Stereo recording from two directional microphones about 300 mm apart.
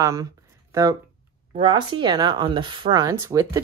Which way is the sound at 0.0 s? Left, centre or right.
Centre.